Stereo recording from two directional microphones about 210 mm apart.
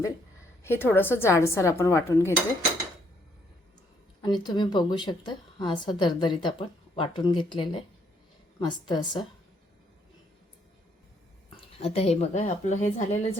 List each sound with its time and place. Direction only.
0.6 s a woman's voice: 10° left (ahead or behind)
4.2 s a woman's voice: 20° left (ahead or behind)
11.5 s a woman's voice: 30° left (ahead or behind)